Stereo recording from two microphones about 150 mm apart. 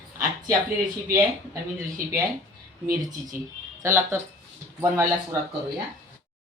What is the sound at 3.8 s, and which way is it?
Speech, 20° right (ahead or behind).